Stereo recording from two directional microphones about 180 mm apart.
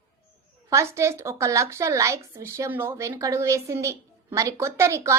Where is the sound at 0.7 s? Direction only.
15° right (ahead or behind).